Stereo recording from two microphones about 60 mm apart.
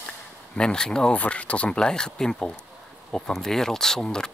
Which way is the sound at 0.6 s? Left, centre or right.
Centre.